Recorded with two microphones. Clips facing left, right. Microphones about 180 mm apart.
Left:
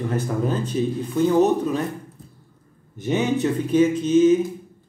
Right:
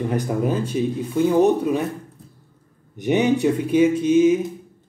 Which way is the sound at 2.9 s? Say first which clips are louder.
Right 3 dB; 15° right (ahead or behind).